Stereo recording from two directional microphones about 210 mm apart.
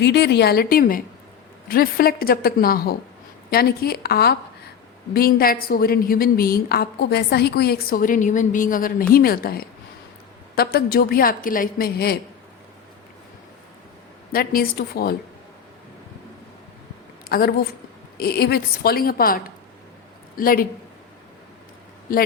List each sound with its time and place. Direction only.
0.0 s a woman's voice: 50° left (ahead or behind)
14.3 s a woman's voice: 45° left (ahead or behind)
17.2 s a woman's voice: 45° left (ahead or behind)